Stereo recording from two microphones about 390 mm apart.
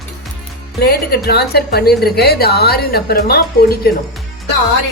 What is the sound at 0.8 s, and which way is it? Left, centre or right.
A woman's voice, left.